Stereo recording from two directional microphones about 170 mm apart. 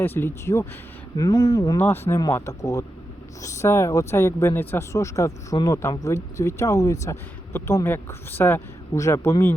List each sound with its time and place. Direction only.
0.0 s speech: 10° left (ahead or behind)